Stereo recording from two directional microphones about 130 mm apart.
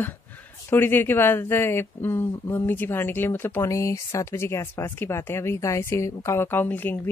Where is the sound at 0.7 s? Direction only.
15° left (ahead or behind).